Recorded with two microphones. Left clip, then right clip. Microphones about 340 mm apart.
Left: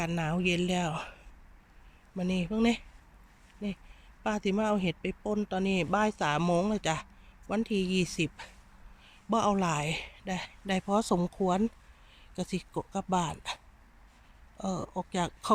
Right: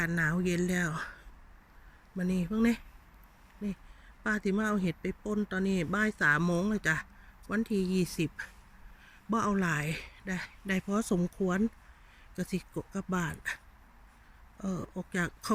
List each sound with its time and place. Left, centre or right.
0.0 s speech: centre
4.2 s speech: centre
14.6 s speech: centre